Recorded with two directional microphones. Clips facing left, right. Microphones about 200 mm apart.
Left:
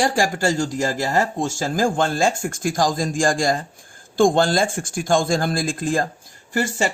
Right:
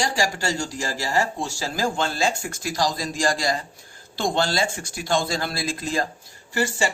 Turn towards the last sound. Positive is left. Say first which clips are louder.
# left 2 dB
turn(degrees=50)  # may be behind; listen again after turning